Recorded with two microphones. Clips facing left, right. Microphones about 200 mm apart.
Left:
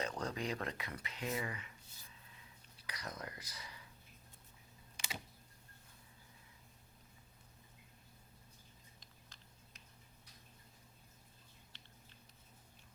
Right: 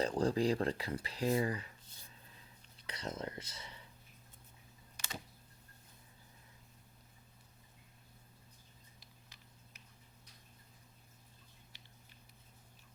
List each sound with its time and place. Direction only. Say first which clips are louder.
0.0 s speech: right 8 dB; 30° right (ahead or behind)
2.8 s speech: right 6 dB; 25° right (ahead or behind)
11.7 s a sound: even; 10° right (ahead or behind)